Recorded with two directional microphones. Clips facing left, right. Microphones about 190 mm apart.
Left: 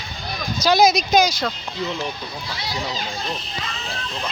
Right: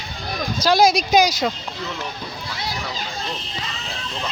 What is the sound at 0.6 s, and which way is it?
Speech, 5° right (ahead or behind).